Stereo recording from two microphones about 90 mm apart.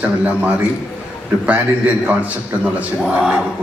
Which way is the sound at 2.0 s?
15° right (ahead or behind).